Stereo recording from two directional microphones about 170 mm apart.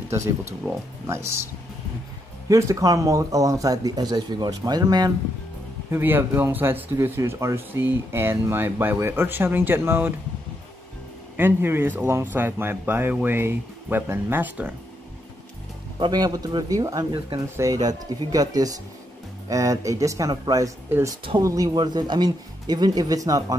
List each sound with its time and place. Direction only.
0.1 s speech: 15° right (ahead or behind)
2.4 s speech: 20° right (ahead or behind)
5.9 s speech: 10° right (ahead or behind)
11.3 s speech: 10° right (ahead or behind)
16.0 s speech: 25° right (ahead or behind)